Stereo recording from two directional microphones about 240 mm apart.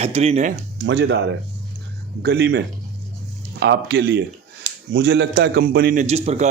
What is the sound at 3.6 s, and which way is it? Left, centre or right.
A man's voice, right.